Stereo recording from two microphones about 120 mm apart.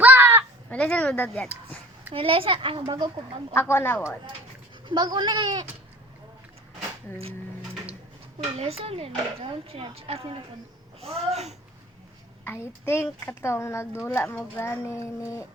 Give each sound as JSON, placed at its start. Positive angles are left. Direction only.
{"t": 0.0, "sound": "a sound", "side_deg": -15}
{"t": 0.7, "sound": "speech", "side_deg": 10}
{"t": 2.1, "sound": "speech", "side_deg": -50}
{"t": 3.5, "sound": "a woman's voice", "side_deg": 20}
{"t": 4.9, "sound": "speech", "side_deg": -35}
{"t": 7.2, "sound": "a sound", "side_deg": -55}
{"t": 8.5, "sound": "speech", "side_deg": -55}
{"t": 12.5, "sound": "a woman's voice", "side_deg": 20}